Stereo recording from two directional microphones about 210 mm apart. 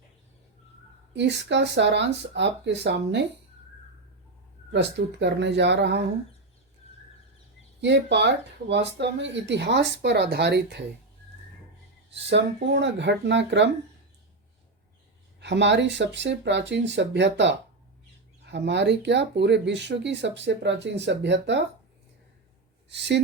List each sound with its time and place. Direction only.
1.1 s speech: 55° right (ahead or behind)
4.7 s speech: 55° right (ahead or behind)
7.8 s speech: 55° right (ahead or behind)
12.1 s speech: 55° right (ahead or behind)
15.4 s speech: 55° right (ahead or behind)
22.9 s speech: 55° right (ahead or behind)